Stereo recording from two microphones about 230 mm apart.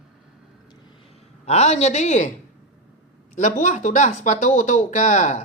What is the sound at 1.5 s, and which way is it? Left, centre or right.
Speech, left.